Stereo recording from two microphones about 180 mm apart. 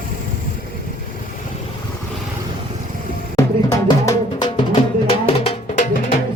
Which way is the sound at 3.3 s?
20° left (ahead or behind).